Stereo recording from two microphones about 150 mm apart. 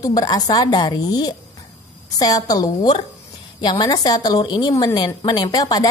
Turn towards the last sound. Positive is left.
turn(degrees=25)  # may be behind; listen again after turning